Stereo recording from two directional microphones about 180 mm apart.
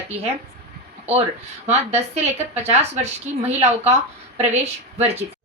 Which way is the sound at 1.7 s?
35° right (ahead or behind).